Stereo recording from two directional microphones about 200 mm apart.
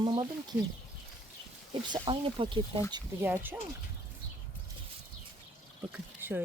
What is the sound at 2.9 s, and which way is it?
Speech, 10° right (ahead or behind).